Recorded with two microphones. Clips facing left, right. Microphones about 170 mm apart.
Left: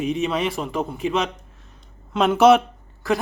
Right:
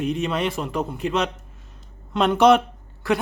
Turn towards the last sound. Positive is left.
turn(degrees=0)  # may be behind; listen again after turning